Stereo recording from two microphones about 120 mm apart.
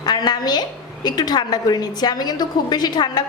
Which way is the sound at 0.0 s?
35° left (ahead or behind).